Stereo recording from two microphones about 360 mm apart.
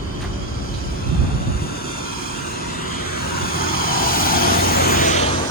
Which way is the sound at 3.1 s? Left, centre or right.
Left.